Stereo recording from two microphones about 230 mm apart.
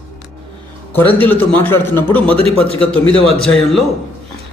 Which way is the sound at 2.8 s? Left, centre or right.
Centre.